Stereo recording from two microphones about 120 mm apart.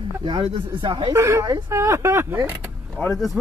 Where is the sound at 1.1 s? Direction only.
25° right (ahead or behind).